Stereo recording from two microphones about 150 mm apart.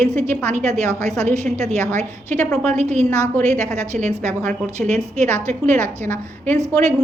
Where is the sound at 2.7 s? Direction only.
50° right (ahead or behind).